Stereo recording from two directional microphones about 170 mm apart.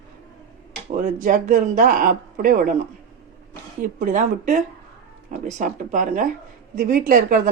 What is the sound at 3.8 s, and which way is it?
Speech, 55° right (ahead or behind).